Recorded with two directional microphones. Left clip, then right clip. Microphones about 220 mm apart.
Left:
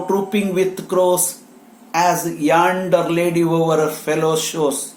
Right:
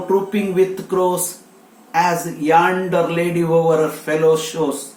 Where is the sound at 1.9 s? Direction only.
35° left (ahead or behind).